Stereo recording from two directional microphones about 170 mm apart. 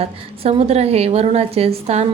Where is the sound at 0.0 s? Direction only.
35° right (ahead or behind).